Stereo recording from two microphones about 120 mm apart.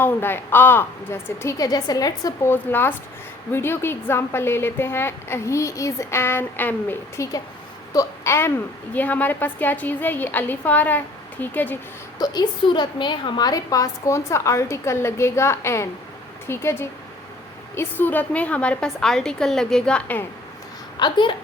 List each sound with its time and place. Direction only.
0.0 s speech: 20° left (ahead or behind)
2.5 s a woman's voice: 20° left (ahead or behind)
12.2 s a woman's voice: 35° left (ahead or behind); by 20.2 s 10° left (ahead or behind)
21.0 s a woman's voice: 40° left (ahead or behind)